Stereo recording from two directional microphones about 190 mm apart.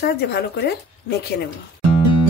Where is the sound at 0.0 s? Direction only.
60° left (ahead or behind).